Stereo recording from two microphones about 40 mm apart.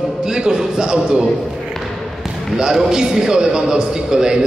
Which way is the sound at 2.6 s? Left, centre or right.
Centre.